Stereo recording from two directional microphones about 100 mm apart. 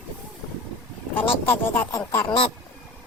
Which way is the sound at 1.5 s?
25° left (ahead or behind).